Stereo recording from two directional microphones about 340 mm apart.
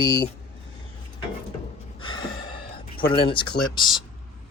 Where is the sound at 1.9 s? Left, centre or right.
Centre.